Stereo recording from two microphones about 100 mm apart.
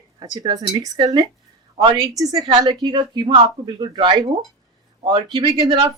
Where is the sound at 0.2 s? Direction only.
40° right (ahead or behind).